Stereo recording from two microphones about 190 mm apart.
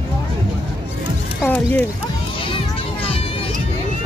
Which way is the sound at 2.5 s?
30° left (ahead or behind).